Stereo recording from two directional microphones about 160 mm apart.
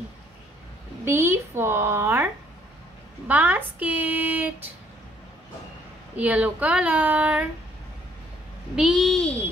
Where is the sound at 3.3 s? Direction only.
10° right (ahead or behind).